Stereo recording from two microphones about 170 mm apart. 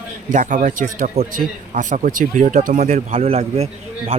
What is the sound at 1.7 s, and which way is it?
Speech, 50° right (ahead or behind).